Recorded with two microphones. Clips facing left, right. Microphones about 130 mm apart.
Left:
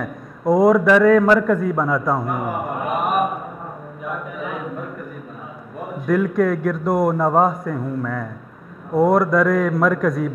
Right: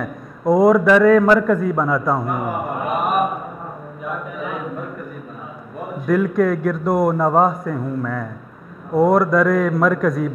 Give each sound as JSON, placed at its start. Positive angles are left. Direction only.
{"t": 0.6, "sound": "a man's voice", "side_deg": -20}
{"t": 0.8, "sound": "a man's voice", "side_deg": -10}
{"t": 4.0, "sound": "a sound", "side_deg": -20}
{"t": 5.8, "sound": "a man's voice", "side_deg": -15}